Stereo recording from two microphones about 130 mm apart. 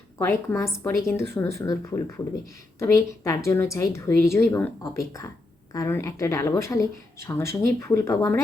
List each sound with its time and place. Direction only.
0.2 s a woman's voice: 20° left (ahead or behind)